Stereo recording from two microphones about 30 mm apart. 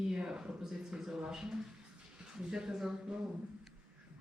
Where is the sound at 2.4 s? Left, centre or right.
Right.